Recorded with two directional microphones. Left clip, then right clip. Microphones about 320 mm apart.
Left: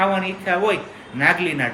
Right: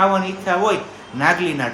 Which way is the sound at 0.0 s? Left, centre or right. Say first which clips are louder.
Right 3 dB; centre.